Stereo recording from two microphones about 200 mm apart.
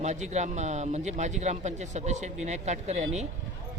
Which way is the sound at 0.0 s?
35° right (ahead or behind).